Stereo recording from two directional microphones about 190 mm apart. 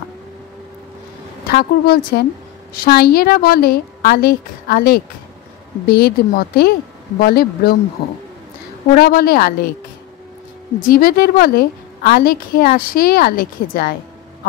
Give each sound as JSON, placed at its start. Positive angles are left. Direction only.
{"t": 1.5, "sound": "a woman's voice", "side_deg": 55}
{"t": 8.9, "sound": "a woman's voice", "side_deg": 50}
{"t": 10.8, "sound": "a woman's voice", "side_deg": 50}